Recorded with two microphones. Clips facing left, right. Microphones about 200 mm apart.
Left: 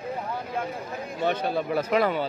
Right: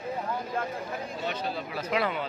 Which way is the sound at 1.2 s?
55° left (ahead or behind).